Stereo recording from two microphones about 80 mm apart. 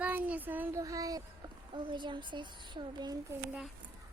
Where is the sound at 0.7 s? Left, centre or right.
Right.